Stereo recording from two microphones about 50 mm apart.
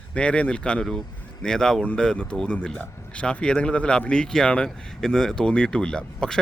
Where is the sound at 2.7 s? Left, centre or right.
Left.